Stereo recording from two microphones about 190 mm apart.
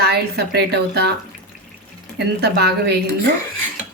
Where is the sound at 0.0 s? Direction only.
60° right (ahead or behind).